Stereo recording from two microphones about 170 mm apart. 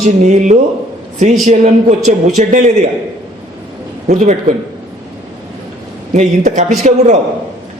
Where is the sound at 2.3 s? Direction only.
45° right (ahead or behind).